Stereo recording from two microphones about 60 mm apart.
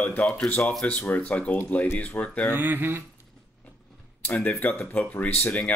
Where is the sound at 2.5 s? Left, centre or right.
Right.